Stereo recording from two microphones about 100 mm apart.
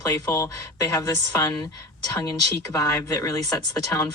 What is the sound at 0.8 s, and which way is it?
Speech, 35° left (ahead or behind).